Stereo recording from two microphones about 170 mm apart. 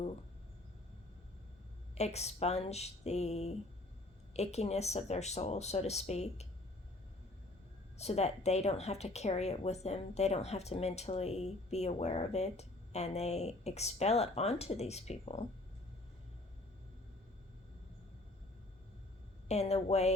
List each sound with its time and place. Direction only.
2.0 s speech: 40° left (ahead or behind)
7.9 s speech: 40° left (ahead or behind)
19.5 s speech: 40° left (ahead or behind)